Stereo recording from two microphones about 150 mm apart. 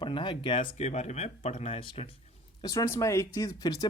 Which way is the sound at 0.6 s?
50° left (ahead or behind).